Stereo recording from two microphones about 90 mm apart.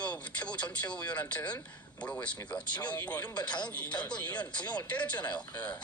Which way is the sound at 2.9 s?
15° left (ahead or behind).